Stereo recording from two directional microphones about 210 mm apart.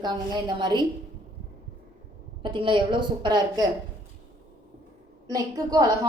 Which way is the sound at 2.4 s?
25° right (ahead or behind).